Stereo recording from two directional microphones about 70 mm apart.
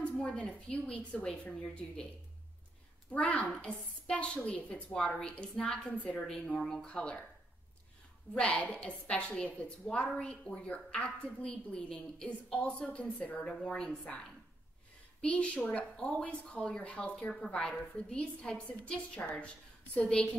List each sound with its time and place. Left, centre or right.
0.0 s a woman's voice: centre
3.1 s a child's voice: left
8.4 s a woman's voice: centre
15.2 s a woman's voice: centre